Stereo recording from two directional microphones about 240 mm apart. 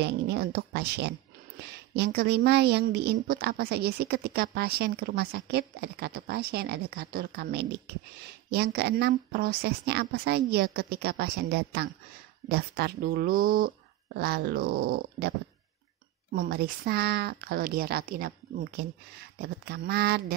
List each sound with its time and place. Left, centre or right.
0.0 s a woman's voice: right